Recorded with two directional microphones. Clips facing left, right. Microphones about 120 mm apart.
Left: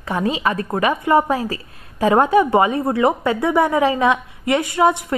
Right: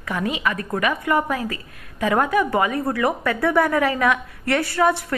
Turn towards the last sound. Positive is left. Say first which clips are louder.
# left 3 dB
turn(degrees=20)  # may be behind; listen again after turning